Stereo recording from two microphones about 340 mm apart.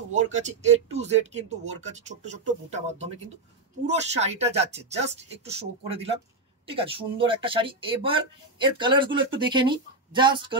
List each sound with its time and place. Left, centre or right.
0.1 s speech: right